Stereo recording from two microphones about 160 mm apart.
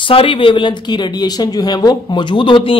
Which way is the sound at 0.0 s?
35° left (ahead or behind).